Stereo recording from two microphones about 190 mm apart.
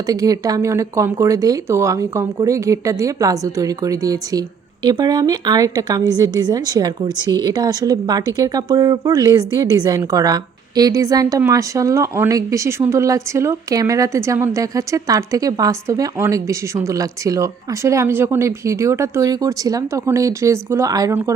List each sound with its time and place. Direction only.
0.1 s speech: 20° right (ahead or behind)